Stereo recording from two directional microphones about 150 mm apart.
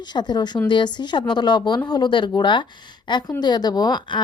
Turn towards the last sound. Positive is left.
turn(degrees=30)  # may be behind; listen again after turning